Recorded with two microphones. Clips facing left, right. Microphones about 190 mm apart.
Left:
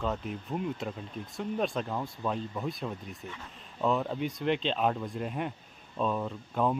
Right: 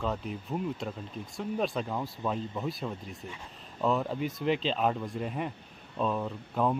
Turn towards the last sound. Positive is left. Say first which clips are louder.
# even
turn(degrees=0)  # may be behind; listen again after turning